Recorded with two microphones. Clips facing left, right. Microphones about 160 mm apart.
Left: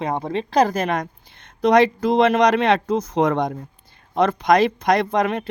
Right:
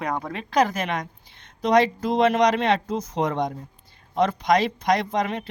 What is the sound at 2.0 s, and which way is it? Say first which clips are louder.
Speech: left 3 dB; 75° left (ahead or behind).